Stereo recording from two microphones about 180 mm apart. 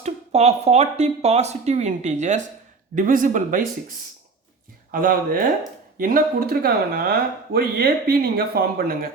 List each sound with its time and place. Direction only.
0.0 s a man's voice: 40° right (ahead or behind)
4.9 s a man's voice: 50° right (ahead or behind)